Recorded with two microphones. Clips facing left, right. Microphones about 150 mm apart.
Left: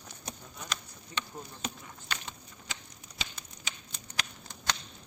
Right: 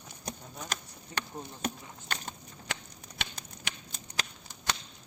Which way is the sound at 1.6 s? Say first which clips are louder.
Right 7 dB; 50° right (ahead or behind).